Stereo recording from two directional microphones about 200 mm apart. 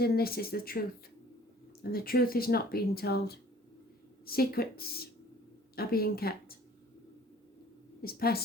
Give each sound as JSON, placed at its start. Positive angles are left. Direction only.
{"t": 0.0, "sound": "speech", "side_deg": 50}
{"t": 8.0, "sound": "speech", "side_deg": 50}